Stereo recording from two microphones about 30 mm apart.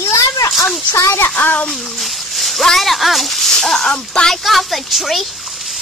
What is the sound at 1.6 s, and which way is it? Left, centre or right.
Speech, centre.